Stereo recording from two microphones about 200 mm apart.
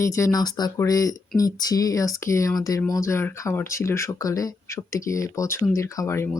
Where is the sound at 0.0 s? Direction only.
15° left (ahead or behind).